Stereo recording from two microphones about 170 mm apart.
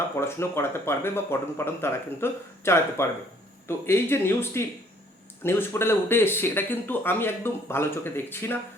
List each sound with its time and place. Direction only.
0.2 s speech: 15° left (ahead or behind)